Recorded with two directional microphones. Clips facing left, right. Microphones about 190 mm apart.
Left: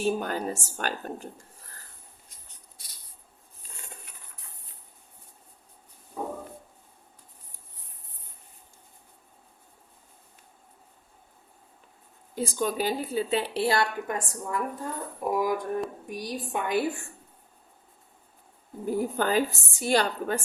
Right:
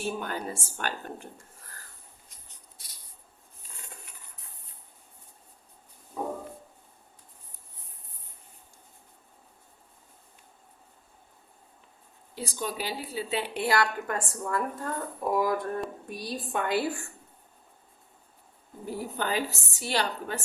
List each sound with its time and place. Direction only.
0.0 s speech: 40° left (ahead or behind)
12.3 s a woman's voice: 50° left (ahead or behind); by 16.8 s 15° left (ahead or behind)
18.9 s a woman's voice: 45° left (ahead or behind)